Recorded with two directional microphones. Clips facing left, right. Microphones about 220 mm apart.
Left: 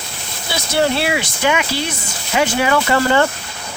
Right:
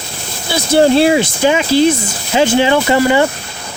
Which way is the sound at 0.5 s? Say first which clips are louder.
Right 8 dB; 30° right (ahead or behind).